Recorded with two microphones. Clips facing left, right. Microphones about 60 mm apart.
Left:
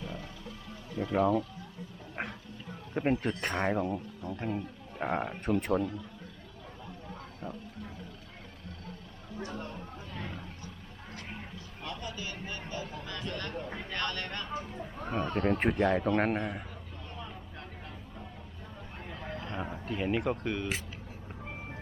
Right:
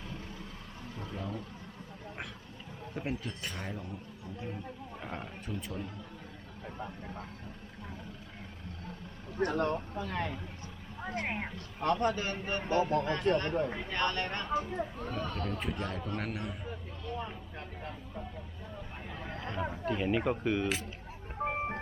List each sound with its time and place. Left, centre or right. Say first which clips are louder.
1.0 s speech: left 14 dB; left
2.9 s speech: left 8 dB; left
5.1 s a man's voice: left 10 dB; left
5.5 s speech: left 12 dB; left
6.7 s vehicle: right 3 dB; right
9.4 s speech: right 10 dB; right
11.5 s a man's voice: right 10 dB; right
13.9 s speech: right 1 dB; centre
14.4 s speech: right 5 dB; centre
15.1 s a man's voice: left 11 dB; left
19.3 s a sound: left 1 dB; right
19.8 s speech: even; centre
20.3 s speech: right 3 dB; centre
21.4 s vehicle: right 12 dB; right